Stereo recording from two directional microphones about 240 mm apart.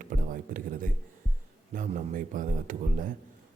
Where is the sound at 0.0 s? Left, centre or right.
Right.